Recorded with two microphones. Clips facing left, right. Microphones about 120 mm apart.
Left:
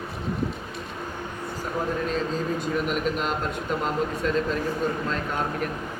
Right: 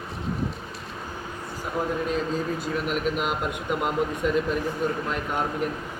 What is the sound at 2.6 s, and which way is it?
Speech, centre (ahead or behind).